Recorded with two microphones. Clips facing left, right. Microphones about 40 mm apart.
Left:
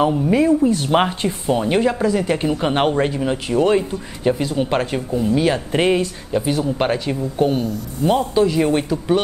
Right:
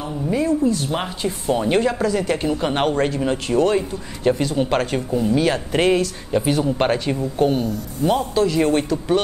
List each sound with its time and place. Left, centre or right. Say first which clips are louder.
0.0 s speech: left 6 dB; left
1.5 s speech: left 1 dB; centre
6.3 s speech: right 1 dB; centre